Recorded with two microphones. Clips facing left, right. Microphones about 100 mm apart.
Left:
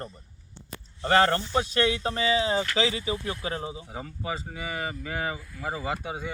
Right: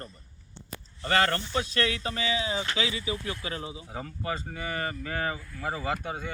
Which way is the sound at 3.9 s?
10° left (ahead or behind).